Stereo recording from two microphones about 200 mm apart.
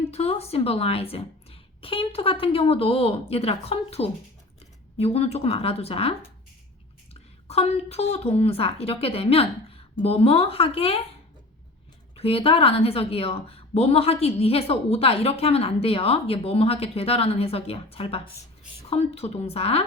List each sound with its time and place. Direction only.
0.1 s a woman's voice: 30° left (ahead or behind)
12.1 s a woman's voice: 30° left (ahead or behind)